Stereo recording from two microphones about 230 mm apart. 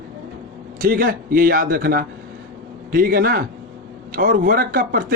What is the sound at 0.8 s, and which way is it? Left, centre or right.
Speech, right.